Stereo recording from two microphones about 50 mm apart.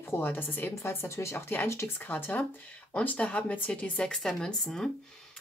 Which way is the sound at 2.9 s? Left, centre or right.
Left.